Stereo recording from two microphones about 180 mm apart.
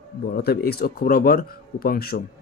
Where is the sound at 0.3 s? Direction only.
60° left (ahead or behind).